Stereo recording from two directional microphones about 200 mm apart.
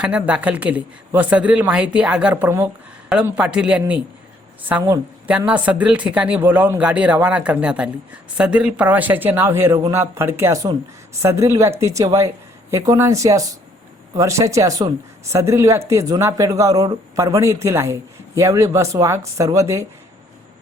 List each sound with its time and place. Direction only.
0.0 s a man's voice: 5° right (ahead or behind)